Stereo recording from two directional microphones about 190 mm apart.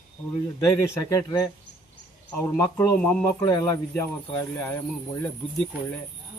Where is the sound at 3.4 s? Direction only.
20° left (ahead or behind).